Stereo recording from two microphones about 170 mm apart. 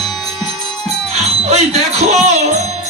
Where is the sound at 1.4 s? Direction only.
40° right (ahead or behind).